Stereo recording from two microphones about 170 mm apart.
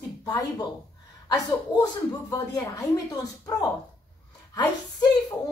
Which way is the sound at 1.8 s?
20° left (ahead or behind).